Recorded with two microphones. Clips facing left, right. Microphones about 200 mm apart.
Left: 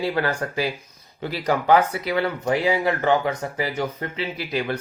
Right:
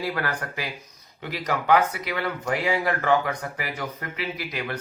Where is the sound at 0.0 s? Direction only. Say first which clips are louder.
Left 5 dB; 25° left (ahead or behind).